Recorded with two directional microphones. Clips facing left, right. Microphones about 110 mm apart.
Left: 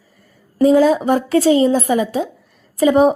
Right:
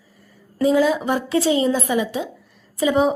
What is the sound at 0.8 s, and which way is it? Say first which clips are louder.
A woman's voice: left 5 dB; 40° left (ahead or behind).